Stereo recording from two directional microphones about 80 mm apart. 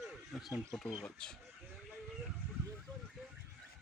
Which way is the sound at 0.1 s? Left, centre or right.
Centre.